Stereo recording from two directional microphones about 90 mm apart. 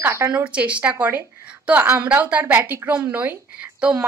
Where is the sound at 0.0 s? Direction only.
25° right (ahead or behind).